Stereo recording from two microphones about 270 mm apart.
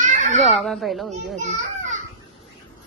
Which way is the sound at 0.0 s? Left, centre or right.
Right.